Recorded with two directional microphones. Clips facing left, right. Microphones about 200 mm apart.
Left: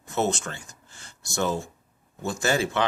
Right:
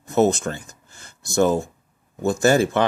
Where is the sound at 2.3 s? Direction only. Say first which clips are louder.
Right 8 dB; 45° right (ahead or behind).